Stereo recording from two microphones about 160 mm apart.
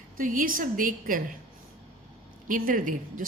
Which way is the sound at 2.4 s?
60° right (ahead or behind).